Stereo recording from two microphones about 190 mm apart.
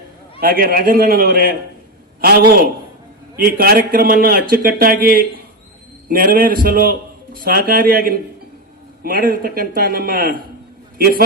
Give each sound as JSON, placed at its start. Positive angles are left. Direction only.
{"t": 0.3, "sound": "a man's voice", "side_deg": -50}